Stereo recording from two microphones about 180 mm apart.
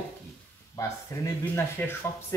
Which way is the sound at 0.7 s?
15° left (ahead or behind).